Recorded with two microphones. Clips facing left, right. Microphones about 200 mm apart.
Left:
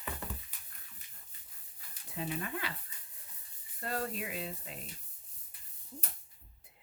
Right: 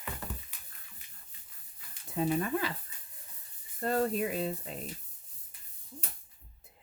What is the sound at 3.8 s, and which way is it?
Speech, 40° right (ahead or behind).